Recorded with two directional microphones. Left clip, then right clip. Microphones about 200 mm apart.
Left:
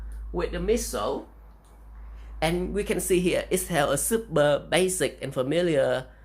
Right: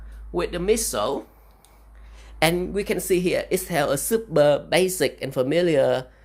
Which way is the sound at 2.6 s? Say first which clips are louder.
Right 2 dB; 25° right (ahead or behind).